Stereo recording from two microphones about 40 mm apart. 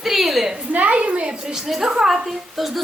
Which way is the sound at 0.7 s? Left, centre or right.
Right.